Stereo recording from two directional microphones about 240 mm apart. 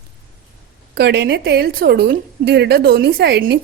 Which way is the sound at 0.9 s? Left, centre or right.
Right.